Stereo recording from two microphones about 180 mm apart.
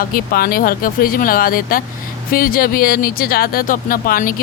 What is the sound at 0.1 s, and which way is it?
Speech, 55° left (ahead or behind).